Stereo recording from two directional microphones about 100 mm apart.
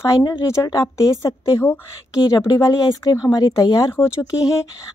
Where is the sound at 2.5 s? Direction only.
40° left (ahead or behind).